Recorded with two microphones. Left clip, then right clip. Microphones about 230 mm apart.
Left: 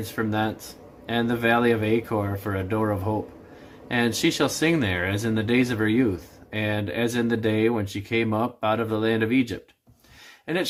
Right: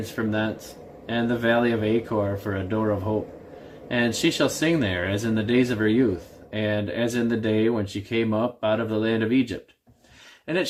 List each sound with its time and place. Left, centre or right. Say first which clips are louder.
0.2 s speech: left 1 dB; centre